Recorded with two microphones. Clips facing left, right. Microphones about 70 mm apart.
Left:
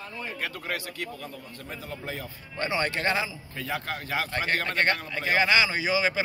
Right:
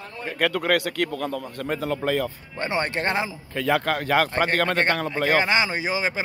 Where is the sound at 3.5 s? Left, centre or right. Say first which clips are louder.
Right 11 dB; right.